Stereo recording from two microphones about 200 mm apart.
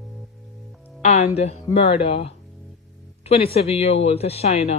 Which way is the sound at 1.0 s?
30° left (ahead or behind).